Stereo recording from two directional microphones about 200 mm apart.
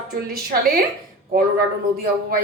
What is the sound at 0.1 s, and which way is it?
Speech, 50° right (ahead or behind).